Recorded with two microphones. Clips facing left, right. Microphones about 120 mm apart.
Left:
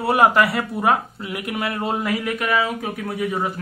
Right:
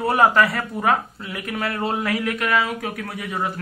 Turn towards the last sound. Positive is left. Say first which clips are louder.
# left 2 dB
turn(degrees=10)  # may be behind; listen again after turning